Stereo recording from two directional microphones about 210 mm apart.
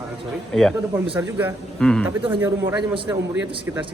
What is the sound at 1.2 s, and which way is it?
Speech, 10° right (ahead or behind).